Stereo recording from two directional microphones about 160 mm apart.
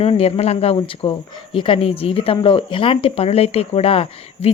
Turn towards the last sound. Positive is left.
turn(degrees=35)  # may be behind; listen again after turning